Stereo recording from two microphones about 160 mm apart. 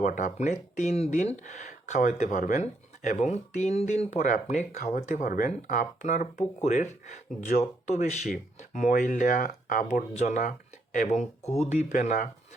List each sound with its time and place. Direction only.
0.0 s speech: 55° left (ahead or behind)